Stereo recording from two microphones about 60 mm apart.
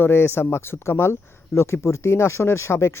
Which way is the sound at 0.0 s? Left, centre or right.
Left.